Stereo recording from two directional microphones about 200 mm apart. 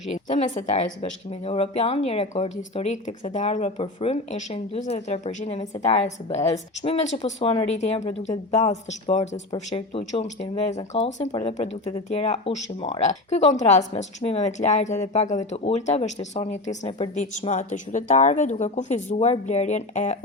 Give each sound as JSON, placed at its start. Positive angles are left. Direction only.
{"t": 0.3, "sound": "speech", "side_deg": 40}